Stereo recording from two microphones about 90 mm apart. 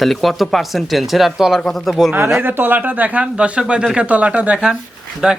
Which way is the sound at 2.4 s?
25° right (ahead or behind).